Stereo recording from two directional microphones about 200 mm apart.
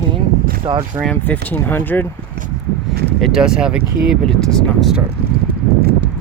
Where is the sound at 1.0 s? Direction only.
5° left (ahead or behind).